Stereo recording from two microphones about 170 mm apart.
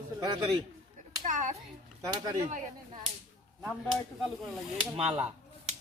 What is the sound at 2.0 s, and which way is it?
Speech, 20° right (ahead or behind).